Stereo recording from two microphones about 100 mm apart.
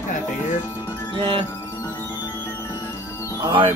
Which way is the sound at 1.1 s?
60° right (ahead or behind).